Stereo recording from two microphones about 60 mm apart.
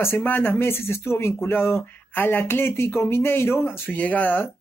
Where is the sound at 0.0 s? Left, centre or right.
Left.